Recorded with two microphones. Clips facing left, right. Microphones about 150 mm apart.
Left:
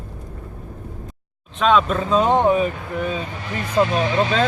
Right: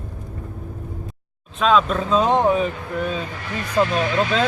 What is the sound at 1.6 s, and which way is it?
Speech, centre (ahead or behind).